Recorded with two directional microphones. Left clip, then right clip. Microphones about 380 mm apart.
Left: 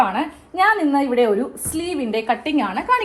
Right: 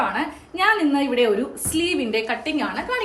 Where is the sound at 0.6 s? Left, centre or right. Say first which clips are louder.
Left 3 dB; centre.